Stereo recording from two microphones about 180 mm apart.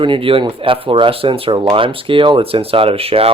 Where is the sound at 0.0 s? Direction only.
30° right (ahead or behind).